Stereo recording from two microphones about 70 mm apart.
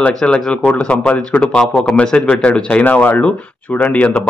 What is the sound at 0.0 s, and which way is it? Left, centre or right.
Speech, centre.